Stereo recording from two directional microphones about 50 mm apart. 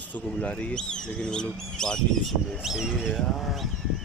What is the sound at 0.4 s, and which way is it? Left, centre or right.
Speech, left.